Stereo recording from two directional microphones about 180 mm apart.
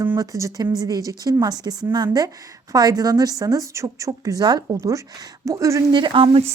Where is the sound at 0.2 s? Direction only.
20° right (ahead or behind).